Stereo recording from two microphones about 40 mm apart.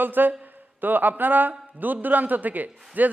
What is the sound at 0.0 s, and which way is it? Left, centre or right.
A man's voice, right.